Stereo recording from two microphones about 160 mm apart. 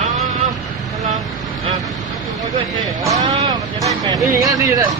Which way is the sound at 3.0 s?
20° right (ahead or behind).